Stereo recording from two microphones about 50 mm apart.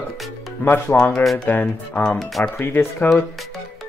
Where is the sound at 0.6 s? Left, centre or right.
Left.